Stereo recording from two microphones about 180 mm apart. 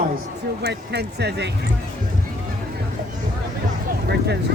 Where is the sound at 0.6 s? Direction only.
65° right (ahead or behind).